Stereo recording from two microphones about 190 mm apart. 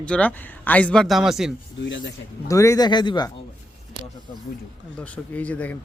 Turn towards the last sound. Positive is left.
turn(degrees=10)  # may be behind; listen again after turning